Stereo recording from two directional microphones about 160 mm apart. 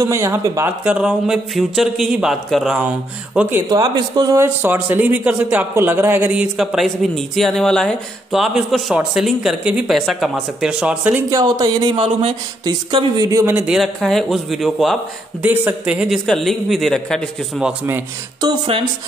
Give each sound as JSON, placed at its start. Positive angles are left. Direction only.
{"t": 0.0, "sound": "speech", "side_deg": -15}
{"t": 0.8, "sound": "speech", "side_deg": -5}
{"t": 3.7, "sound": "speech", "side_deg": -25}
{"t": 4.6, "sound": "speech", "side_deg": -15}
{"t": 11.2, "sound": "speech", "side_deg": -20}
{"t": 12.0, "sound": "speech", "side_deg": -35}
{"t": 13.2, "sound": "speech", "side_deg": -20}